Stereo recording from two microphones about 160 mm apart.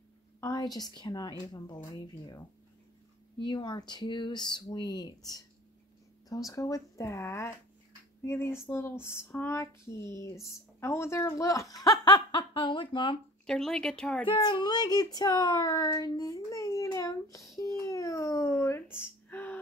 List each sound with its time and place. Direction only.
0.4 s speech: 25° left (ahead or behind)
13.5 s speech: 5° left (ahead or behind)
14.2 s speech: 30° left (ahead or behind)
17.6 s babbling: 20° left (ahead or behind)
18.9 s a sound: 10° left (ahead or behind)